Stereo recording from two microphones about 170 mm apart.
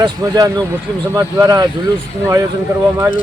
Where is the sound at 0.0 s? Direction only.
20° right (ahead or behind).